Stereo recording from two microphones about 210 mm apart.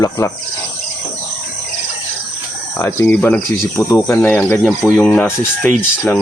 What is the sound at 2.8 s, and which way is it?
Speech, 10° left (ahead or behind).